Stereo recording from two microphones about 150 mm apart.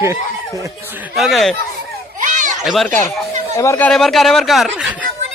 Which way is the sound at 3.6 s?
15° left (ahead or behind).